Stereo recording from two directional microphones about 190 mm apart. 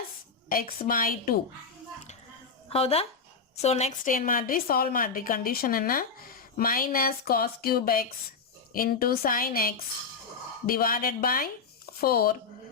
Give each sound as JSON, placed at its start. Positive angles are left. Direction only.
{"t": 0.4, "sound": "a woman's voice", "side_deg": 45}
{"t": 2.6, "sound": "a woman's voice", "side_deg": 30}